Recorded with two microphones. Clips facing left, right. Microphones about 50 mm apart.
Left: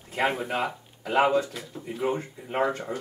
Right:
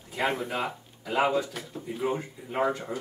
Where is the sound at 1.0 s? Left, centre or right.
Left.